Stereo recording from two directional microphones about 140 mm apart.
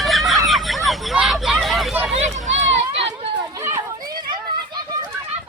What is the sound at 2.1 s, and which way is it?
Run, 55° right (ahead or behind).